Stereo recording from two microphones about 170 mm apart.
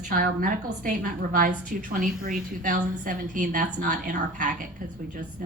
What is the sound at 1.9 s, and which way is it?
A woman's voice, 50° right (ahead or behind).